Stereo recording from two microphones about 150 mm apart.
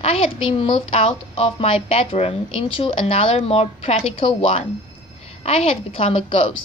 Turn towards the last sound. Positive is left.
turn(degrees=35)  # may be behind; listen again after turning